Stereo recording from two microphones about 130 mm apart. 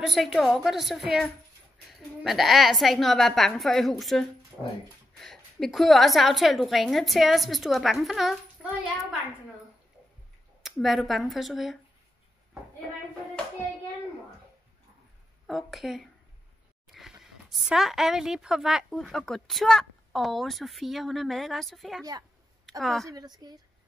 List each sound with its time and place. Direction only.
0.0 s a woman's voice: centre (ahead or behind)
10.6 s a woman's voice: centre (ahead or behind)
15.4 s a woman's voice: centre (ahead or behind)
23.0 s a woman's voice: 30° right (ahead or behind)